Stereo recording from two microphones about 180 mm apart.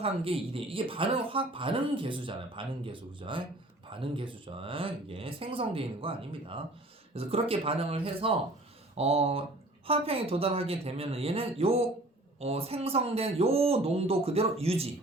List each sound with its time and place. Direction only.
0.0 s speech: 30° right (ahead or behind)